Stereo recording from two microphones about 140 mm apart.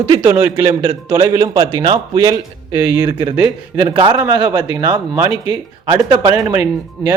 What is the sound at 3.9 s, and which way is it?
A man's voice, 35° right (ahead or behind).